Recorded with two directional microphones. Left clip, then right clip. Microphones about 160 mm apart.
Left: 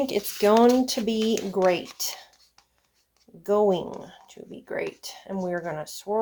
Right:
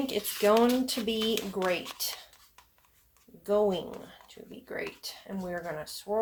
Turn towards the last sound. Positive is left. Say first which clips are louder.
# left 4 dB
turn(degrees=65)  # may be behind; listen again after turning